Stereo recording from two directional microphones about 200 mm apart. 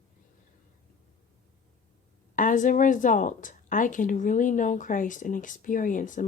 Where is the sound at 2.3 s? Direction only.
40° left (ahead or behind).